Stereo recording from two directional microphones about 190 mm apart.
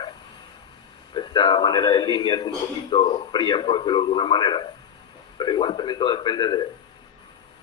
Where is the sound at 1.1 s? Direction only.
25° left (ahead or behind).